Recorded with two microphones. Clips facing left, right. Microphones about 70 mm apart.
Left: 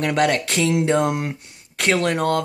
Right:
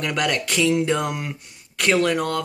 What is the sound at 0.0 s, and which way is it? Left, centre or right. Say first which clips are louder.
Speech: left 4 dB; left.